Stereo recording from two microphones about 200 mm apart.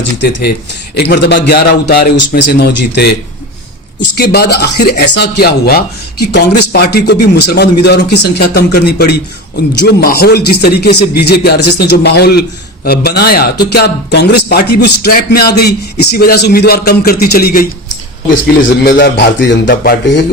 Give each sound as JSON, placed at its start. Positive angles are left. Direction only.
{"t": 0.2, "sound": "a man's voice", "side_deg": 60}
{"t": 4.1, "sound": "speech", "side_deg": 55}